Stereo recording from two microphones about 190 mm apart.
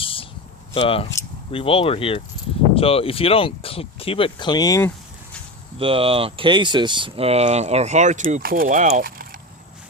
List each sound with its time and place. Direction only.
0.0 s a sound: 30° left (ahead or behind)
0.7 s speech: 30° left (ahead or behind)
5.8 s speech: 30° right (ahead or behind); by 9.4 s 50° right (ahead or behind)